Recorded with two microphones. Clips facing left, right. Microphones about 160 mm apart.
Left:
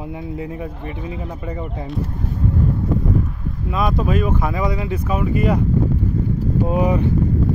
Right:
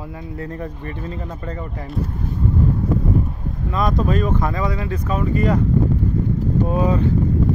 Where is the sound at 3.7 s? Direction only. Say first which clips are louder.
Even; 5° left (ahead or behind).